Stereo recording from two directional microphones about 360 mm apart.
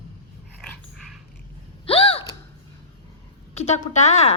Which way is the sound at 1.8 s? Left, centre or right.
Centre.